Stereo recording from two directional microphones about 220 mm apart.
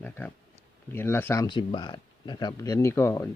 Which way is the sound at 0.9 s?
10° left (ahead or behind).